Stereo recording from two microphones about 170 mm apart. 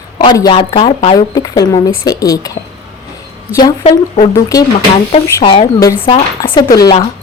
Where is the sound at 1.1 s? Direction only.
20° left (ahead or behind).